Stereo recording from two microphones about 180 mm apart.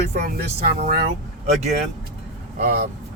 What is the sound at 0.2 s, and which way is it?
Speech, 45° right (ahead or behind).